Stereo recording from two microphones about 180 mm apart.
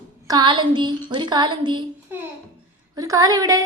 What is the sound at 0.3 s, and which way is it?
A woman's voice, 25° right (ahead or behind).